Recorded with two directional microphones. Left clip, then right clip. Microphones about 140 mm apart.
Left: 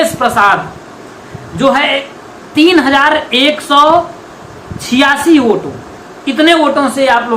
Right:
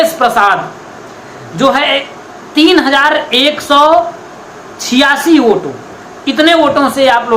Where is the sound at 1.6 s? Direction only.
35° right (ahead or behind).